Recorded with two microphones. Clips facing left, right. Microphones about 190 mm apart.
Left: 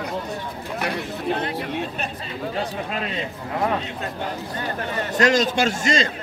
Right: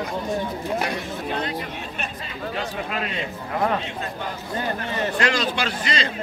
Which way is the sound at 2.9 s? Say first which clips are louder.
Left 1 dB; 35° left (ahead or behind).